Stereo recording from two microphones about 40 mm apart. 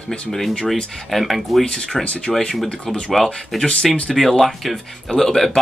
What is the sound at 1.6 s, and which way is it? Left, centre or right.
Speech, left.